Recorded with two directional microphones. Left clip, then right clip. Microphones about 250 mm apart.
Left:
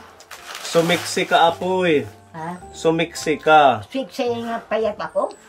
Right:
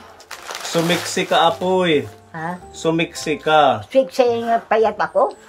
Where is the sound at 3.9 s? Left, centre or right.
Centre.